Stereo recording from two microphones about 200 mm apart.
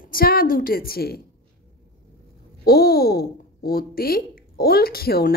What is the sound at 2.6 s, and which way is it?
Speech, 50° left (ahead or behind).